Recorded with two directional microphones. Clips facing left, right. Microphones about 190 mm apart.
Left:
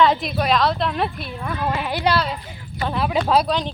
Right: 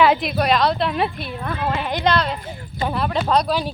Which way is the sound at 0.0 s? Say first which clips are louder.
Right 1 dB; 5° right (ahead or behind).